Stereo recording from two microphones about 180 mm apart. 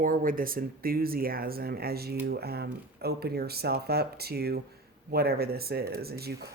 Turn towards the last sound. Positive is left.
turn(degrees=-60)  # may be behind; listen again after turning